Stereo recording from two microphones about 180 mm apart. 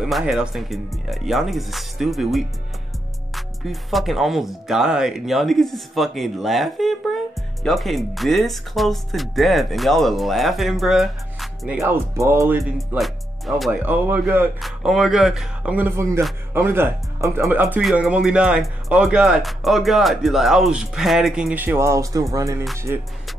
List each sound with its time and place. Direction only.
0.0 s speech: 5° right (ahead or behind)
11.8 s speech: 15° right (ahead or behind)